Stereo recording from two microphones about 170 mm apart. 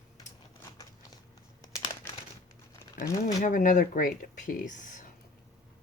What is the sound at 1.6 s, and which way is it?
Crumpling, 25° left (ahead or behind).